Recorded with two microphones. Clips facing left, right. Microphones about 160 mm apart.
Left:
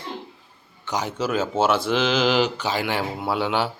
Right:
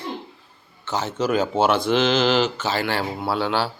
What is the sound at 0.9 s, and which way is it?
Speech, 15° left (ahead or behind).